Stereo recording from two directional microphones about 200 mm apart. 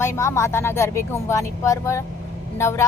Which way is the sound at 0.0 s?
15° left (ahead or behind).